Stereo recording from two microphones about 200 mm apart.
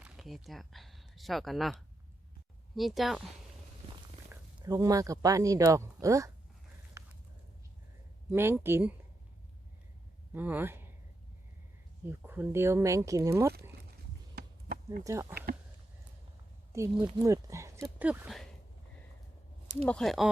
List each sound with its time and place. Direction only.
0.0 s speech: centre (ahead or behind)
2.7 s speech: centre (ahead or behind)
4.3 s speech: 15° right (ahead or behind)
7.0 s a sound: 15° right (ahead or behind)
8.3 s speech: 10° right (ahead or behind)
10.3 s speech: 10° right (ahead or behind)
12.0 s speech: 10° right (ahead or behind)
13.5 s a sound: 55° right (ahead or behind)
14.4 s chop: 50° right (ahead or behind)
15.0 s speech: 15° right (ahead or behind)
16.7 s speech: 15° right (ahead or behind)
17.8 s speech: 5° right (ahead or behind)
19.8 s speech: 5° left (ahead or behind)